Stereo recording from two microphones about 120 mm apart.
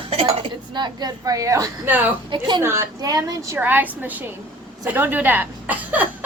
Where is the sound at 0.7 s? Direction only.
35° right (ahead or behind).